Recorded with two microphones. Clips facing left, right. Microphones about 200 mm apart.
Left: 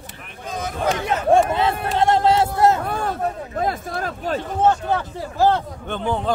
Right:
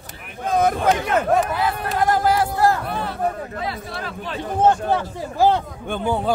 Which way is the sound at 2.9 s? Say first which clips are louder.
Even; 45° left (ahead or behind).